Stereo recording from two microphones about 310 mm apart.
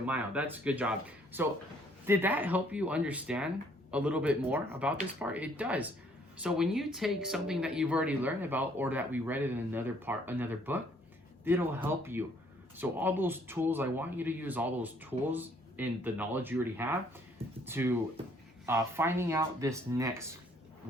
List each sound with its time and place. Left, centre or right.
0.0 s speech: centre